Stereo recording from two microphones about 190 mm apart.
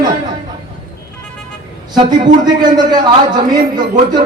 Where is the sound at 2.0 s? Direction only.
25° right (ahead or behind).